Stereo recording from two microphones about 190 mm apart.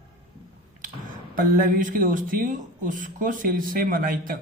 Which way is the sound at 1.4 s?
50° right (ahead or behind).